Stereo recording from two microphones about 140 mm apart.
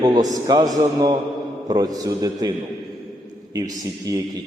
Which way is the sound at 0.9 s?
30° right (ahead or behind).